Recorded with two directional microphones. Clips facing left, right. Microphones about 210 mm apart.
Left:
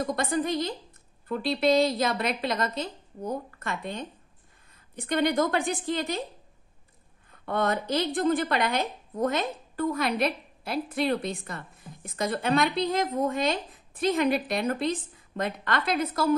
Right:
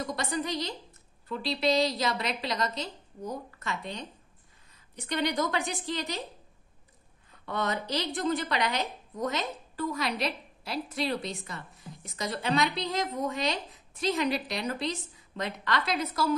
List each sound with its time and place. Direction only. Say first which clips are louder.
0.0 s a woman's voice: left 5 dB; 55° left (ahead or behind)
7.4 s a woman's voice: left 5 dB; 55° left (ahead or behind)